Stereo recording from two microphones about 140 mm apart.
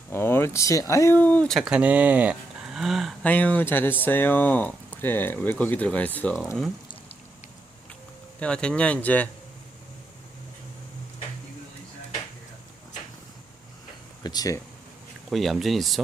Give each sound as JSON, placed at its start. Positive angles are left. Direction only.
{"t": 0.1, "sound": "speech", "side_deg": 15}
{"t": 1.5, "sound": "speech", "side_deg": -5}
{"t": 3.2, "sound": "speech", "side_deg": 10}
{"t": 8.4, "sound": "speech", "side_deg": 5}
{"t": 14.3, "sound": "speech", "side_deg": 25}
{"t": 15.3, "sound": "speech", "side_deg": 0}